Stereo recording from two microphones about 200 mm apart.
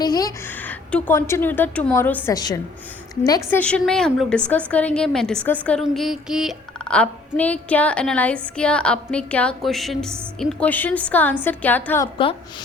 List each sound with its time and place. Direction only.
0.0 s a woman's voice: 20° left (ahead or behind)
3.6 s a woman's voice: 5° left (ahead or behind)
12.1 s a woman's voice: 25° left (ahead or behind)